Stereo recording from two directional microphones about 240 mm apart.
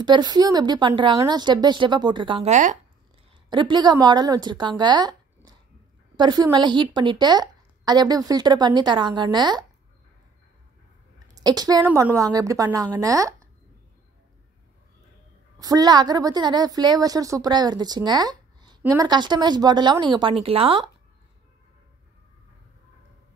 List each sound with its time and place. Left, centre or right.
0.0 s a woman's voice: centre
3.4 s a woman's voice: centre
11.2 s a woman's voice: centre
15.6 s a woman's voice: centre